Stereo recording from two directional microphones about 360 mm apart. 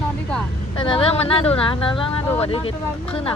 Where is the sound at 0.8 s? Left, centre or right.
Centre.